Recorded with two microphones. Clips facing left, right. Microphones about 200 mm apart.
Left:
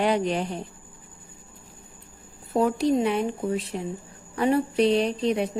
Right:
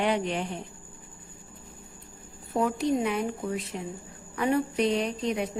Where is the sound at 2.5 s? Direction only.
35° left (ahead or behind).